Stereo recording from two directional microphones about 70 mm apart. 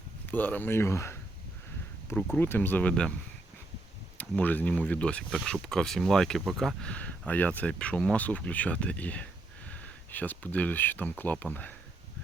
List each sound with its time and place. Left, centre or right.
0.3 s speech: left
2.4 s speech: left
4.2 s speech: left; by 6.8 s centre
6.8 s speech: centre